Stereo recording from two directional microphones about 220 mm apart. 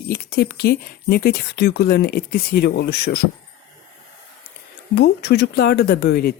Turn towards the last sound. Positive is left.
turn(degrees=45)  # may be behind; listen again after turning